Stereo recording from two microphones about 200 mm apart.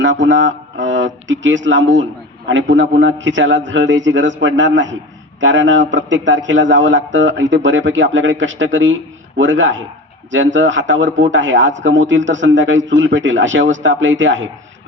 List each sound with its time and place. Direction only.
0.0 s a man's voice: 65° right (ahead or behind)